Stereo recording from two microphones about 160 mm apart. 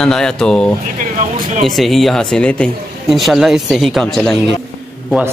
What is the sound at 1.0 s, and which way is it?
Speech, 55° right (ahead or behind).